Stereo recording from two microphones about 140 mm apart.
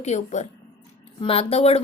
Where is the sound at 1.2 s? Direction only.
40° left (ahead or behind).